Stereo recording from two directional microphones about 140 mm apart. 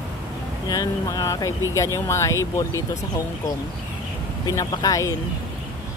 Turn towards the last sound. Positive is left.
turn(degrees=25)  # may be behind; listen again after turning